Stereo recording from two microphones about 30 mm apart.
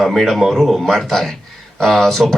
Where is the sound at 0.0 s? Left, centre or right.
Centre.